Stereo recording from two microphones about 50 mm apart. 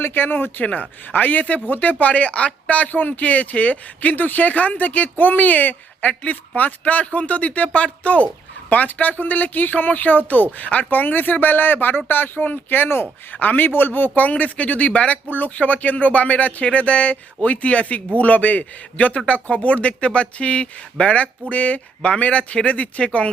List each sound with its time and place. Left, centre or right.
0.0 s speech: left
0.6 s speech: left
13.3 s speech: left
14.2 s speech: left